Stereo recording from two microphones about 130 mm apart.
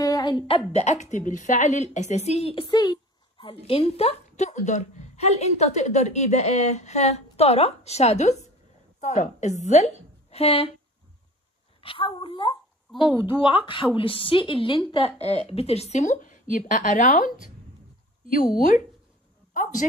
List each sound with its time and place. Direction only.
0.0 s a sound: 30° left (ahead or behind)
0.7 s a woman's voice: 60° left (ahead or behind); by 3.4 s 35° left (ahead or behind)
3.4 s a woman's voice: 45° left (ahead or behind); by 9.9 s 60° left (ahead or behind)
10.3 s speech: 50° left (ahead or behind)
11.8 s a woman's voice: 45° left (ahead or behind); by 17.5 s 90° left
18.5 s speech: 80° left